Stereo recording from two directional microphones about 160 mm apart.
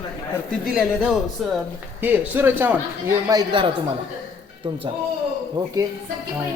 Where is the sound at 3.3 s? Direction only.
30° right (ahead or behind).